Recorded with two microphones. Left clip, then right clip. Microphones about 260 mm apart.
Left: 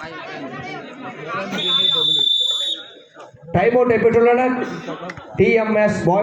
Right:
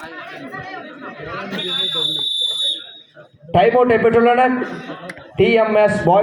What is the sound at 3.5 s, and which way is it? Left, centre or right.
A man's voice, right.